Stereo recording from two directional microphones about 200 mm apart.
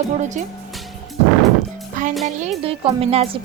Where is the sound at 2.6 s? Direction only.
30° right (ahead or behind).